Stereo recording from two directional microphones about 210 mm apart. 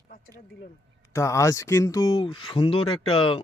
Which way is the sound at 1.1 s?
15° left (ahead or behind).